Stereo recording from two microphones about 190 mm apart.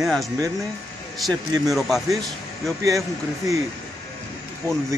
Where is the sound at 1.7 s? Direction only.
Centre (ahead or behind).